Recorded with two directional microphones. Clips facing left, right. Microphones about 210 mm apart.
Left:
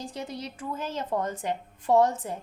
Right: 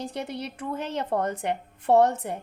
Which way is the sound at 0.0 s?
65° right (ahead or behind).